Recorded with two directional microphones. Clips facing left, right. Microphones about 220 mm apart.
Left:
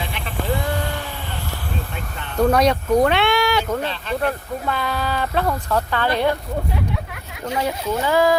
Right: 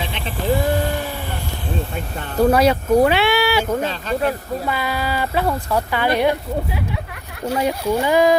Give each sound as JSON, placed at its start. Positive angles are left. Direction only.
{"t": 2.4, "sound": "speech", "side_deg": -5}
{"t": 7.6, "sound": "speech", "side_deg": -15}